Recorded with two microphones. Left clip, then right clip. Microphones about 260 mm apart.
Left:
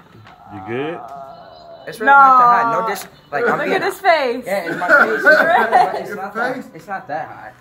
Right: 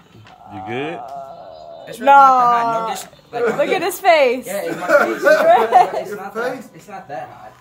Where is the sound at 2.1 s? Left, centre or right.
Right.